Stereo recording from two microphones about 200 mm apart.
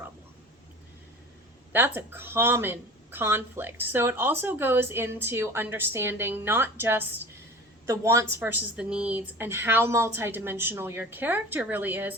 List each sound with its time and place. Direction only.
1.7 s a woman's voice: 10° right (ahead or behind)